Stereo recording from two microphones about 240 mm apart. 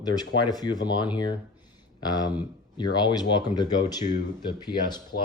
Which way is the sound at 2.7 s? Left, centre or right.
Centre.